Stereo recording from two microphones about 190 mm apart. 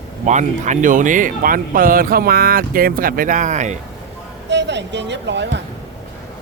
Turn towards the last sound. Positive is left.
turn(degrees=-65)  # may be behind; listen again after turning